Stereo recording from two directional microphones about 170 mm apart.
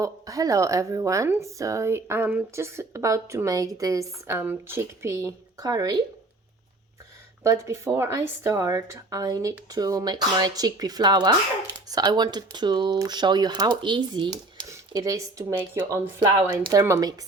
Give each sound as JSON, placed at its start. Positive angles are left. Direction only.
{"t": 0.0, "sound": "speech", "side_deg": -20}
{"t": 7.4, "sound": "a woman's voice", "side_deg": -15}